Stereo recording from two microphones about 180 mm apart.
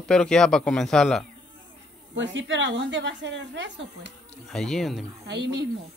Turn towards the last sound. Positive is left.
turn(degrees=-70)  # may be behind; listen again after turning